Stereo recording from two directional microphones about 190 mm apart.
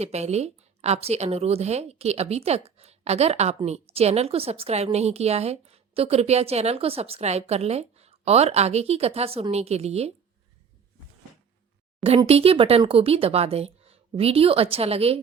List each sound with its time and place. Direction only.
0.0 s a woman's voice: 35° right (ahead or behind)
12.0 s a woman's voice: 30° right (ahead or behind)